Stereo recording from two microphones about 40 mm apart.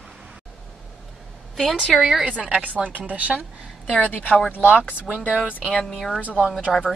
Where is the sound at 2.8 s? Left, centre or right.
Right.